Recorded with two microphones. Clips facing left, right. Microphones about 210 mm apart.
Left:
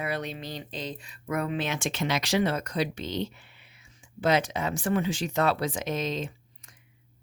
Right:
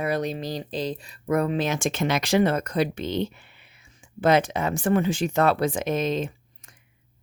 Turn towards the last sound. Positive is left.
turn(degrees=-55)  # may be behind; listen again after turning